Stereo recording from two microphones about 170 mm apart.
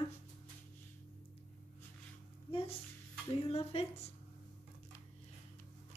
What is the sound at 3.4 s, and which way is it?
Speech, 35° left (ahead or behind).